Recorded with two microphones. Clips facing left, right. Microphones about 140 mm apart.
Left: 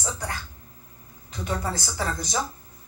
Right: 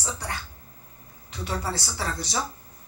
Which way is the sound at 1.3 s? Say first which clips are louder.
Left 1 dB; 45° left (ahead or behind).